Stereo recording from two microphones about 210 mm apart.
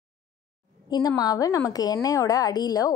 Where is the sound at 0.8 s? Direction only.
20° left (ahead or behind).